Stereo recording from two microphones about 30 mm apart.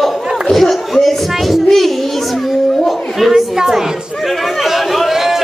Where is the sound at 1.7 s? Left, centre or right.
Centre.